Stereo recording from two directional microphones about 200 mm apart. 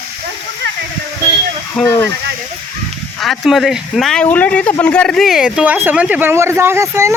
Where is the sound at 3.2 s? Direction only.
Centre (ahead or behind).